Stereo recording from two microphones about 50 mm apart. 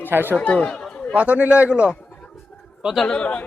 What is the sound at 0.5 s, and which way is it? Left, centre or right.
Chatter, left.